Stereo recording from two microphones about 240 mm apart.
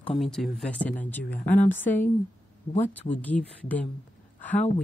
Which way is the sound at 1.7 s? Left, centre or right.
Centre.